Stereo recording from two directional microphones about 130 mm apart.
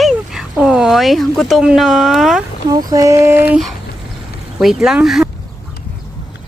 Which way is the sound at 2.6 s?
25° right (ahead or behind).